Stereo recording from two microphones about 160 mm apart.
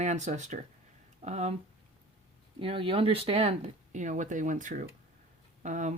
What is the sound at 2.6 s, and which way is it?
Speech, 35° right (ahead or behind).